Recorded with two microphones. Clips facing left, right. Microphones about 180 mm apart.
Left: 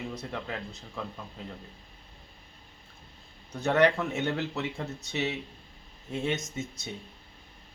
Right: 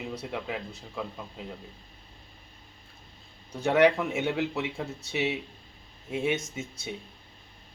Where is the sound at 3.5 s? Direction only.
10° right (ahead or behind).